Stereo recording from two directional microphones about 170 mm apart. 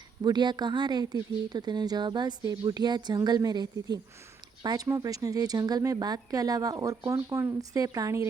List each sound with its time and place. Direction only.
0.2 s speech: 25° right (ahead or behind)